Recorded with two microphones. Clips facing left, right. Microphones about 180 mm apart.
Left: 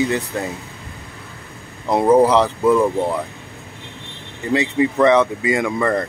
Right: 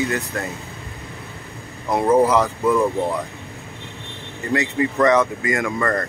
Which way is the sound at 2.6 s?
30° left (ahead or behind).